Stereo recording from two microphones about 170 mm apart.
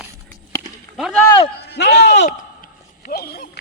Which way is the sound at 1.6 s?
80° left.